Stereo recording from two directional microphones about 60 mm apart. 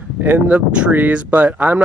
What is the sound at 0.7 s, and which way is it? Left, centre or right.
Speech, centre.